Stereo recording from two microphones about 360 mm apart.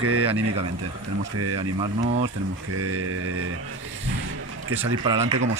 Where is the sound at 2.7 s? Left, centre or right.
Right.